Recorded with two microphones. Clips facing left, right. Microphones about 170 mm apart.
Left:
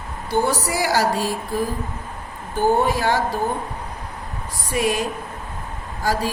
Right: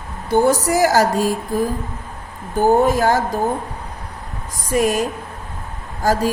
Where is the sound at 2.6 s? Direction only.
45° right (ahead or behind).